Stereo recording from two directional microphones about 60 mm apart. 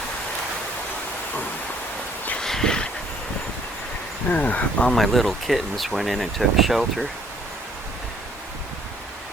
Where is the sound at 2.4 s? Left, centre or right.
Centre.